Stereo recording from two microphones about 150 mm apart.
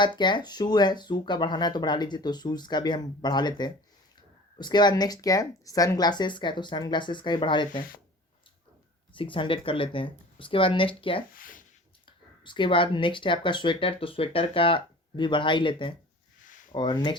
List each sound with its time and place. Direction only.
0.0 s speech: 30° left (ahead or behind)
9.1 s speech: 35° left (ahead or behind)
11.3 s speech: 65° left (ahead or behind)
12.4 s speech: 30° left (ahead or behind)